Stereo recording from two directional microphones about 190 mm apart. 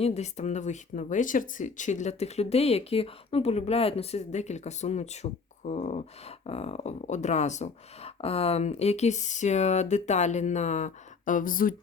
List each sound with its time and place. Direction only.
0.0 s speech: 35° left (ahead or behind)